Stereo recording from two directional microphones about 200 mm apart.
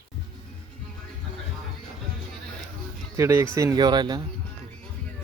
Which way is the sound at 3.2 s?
15° right (ahead or behind).